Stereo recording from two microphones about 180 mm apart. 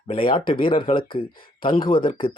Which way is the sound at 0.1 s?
30° left (ahead or behind).